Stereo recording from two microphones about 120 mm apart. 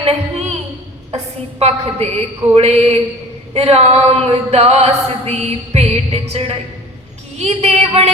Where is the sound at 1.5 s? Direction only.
60° right (ahead or behind).